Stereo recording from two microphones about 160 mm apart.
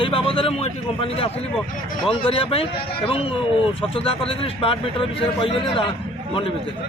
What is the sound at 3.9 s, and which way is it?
A man's voice, 35° left (ahead or behind).